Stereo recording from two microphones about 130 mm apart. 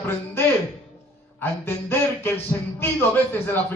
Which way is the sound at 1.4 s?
15° left (ahead or behind).